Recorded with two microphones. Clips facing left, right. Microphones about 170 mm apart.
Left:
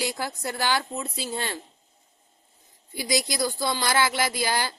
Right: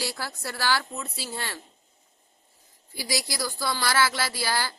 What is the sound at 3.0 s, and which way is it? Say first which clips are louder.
A woman's voice: left 5 dB; 20° left (ahead or behind).